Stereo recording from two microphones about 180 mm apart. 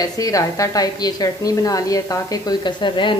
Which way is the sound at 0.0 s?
20° left (ahead or behind).